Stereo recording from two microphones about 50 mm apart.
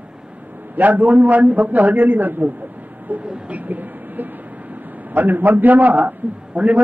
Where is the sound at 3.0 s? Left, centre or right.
Right.